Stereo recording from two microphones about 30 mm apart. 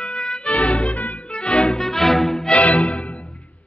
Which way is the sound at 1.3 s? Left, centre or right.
Left.